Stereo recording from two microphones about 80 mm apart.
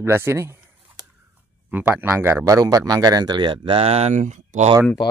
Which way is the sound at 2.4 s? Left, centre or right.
Right.